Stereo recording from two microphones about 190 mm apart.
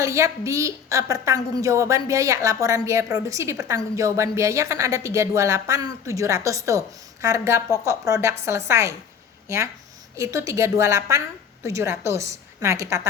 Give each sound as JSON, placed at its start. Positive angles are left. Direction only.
{"t": 0.0, "sound": "a woman's voice", "side_deg": -15}